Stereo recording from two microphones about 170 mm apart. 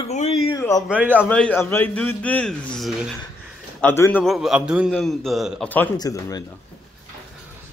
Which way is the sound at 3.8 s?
10° left (ahead or behind).